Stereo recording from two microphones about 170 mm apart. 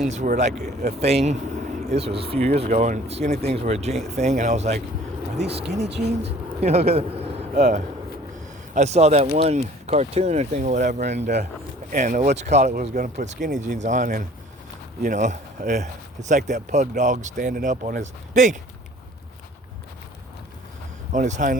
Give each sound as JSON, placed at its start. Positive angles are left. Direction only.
{"t": 0.0, "sound": "speech", "side_deg": -45}
{"t": 5.8, "sound": "speech", "side_deg": -85}
{"t": 6.6, "sound": "speech", "side_deg": -40}
{"t": 21.1, "sound": "speech", "side_deg": -45}